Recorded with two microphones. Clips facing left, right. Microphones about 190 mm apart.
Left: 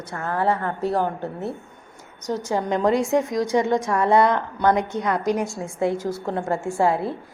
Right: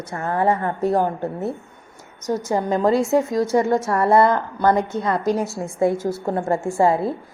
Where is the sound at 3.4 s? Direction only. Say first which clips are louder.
Right 2 dB; 5° right (ahead or behind).